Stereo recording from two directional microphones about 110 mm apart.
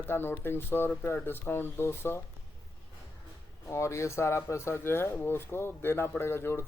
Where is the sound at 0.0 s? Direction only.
20° left (ahead or behind).